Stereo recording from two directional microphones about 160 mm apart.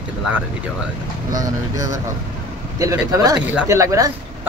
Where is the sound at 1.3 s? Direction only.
20° right (ahead or behind).